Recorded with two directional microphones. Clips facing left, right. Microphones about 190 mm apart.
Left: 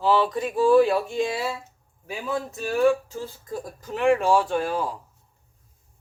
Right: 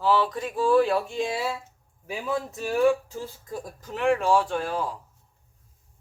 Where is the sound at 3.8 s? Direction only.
5° left (ahead or behind).